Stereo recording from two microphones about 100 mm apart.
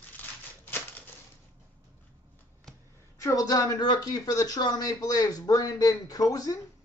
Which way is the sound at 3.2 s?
35° left (ahead or behind).